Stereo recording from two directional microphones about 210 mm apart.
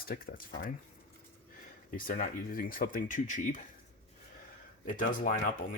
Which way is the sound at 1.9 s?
40° left (ahead or behind).